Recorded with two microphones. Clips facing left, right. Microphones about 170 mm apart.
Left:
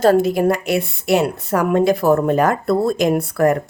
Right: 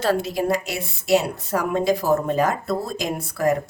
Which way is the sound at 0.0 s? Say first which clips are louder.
Left 8 dB; 50° left (ahead or behind).